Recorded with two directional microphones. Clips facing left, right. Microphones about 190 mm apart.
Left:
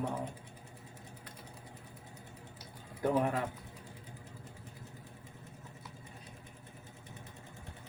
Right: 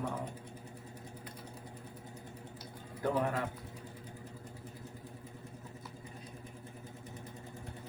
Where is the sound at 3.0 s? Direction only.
15° left (ahead or behind).